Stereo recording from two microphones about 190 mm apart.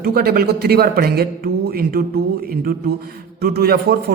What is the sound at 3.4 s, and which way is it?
Speech, 55° right (ahead or behind).